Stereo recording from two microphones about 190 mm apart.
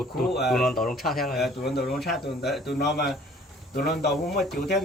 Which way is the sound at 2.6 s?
60° left (ahead or behind).